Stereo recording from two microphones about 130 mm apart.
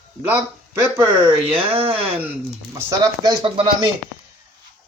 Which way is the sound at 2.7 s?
25° right (ahead or behind).